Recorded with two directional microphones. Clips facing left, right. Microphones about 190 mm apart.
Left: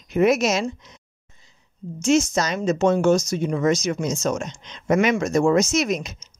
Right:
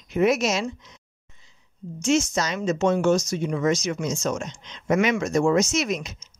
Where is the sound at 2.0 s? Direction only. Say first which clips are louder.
Left 3 dB; 40° left (ahead or behind).